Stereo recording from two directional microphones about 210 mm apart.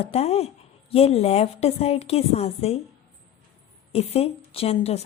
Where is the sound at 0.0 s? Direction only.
30° left (ahead or behind).